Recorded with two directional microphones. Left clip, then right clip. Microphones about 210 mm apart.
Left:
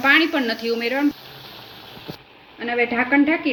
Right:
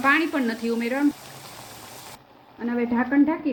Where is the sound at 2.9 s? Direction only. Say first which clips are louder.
Left 2 dB; 25° right (ahead or behind).